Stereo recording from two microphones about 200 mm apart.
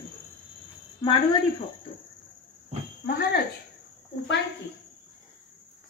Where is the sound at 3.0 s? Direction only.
50° left (ahead or behind).